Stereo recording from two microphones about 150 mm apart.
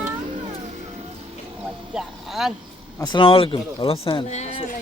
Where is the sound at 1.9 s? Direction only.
5° right (ahead or behind).